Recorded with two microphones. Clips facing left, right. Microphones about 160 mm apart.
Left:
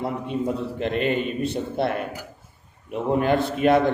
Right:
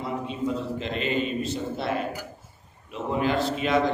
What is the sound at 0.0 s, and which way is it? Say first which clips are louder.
A man's voice: left 3 dB; 55° left (ahead or behind).